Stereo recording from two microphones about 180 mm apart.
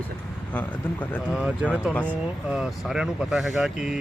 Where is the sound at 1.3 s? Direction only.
5° right (ahead or behind).